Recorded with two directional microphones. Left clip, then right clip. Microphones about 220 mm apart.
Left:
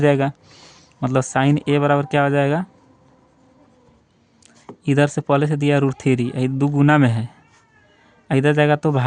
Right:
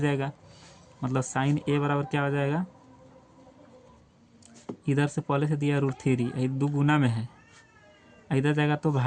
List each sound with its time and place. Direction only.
0.0 s speech: 45° left (ahead or behind)
4.9 s speech: 45° left (ahead or behind)
8.3 s speech: 45° left (ahead or behind)